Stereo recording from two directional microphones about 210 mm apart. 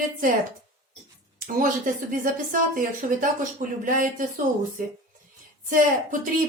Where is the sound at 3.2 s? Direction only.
40° right (ahead or behind).